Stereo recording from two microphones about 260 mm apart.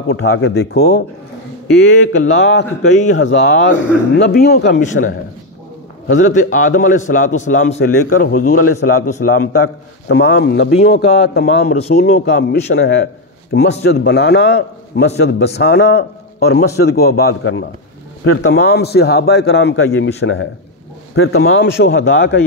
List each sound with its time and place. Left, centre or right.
0.1 s speech: left
2.3 s a man's voice: left
6.3 s a man's voice: left
7.8 s a man's voice: left
8.3 s a man's voice: left
9.2 s a man's voice: left
10.0 s a man's voice: left
17.3 s speech: left
18.5 s a man's voice: left